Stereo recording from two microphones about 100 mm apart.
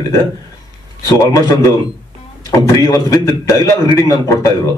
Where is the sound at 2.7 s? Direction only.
35° left (ahead or behind).